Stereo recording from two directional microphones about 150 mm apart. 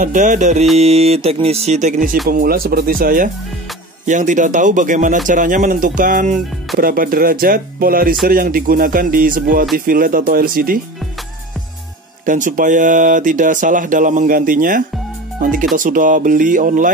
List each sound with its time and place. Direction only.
0.0 s speech: 60° right (ahead or behind)
0.7 s speech: 45° right (ahead or behind)
2.2 s speech: 75° right (ahead or behind)
4.0 s speech: 55° right (ahead or behind)
6.8 s speech: 70° right (ahead or behind)
12.3 s speech: 60° right (ahead or behind)